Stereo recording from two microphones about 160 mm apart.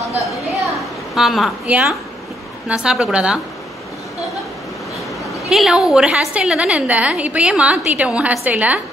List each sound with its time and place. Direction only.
1.1 s a woman's voice: centre (ahead or behind)
5.5 s a woman's voice: 5° right (ahead or behind)